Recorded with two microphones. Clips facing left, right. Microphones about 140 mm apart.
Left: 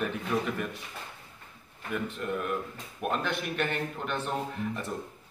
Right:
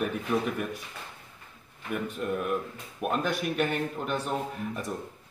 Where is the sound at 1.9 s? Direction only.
10° right (ahead or behind).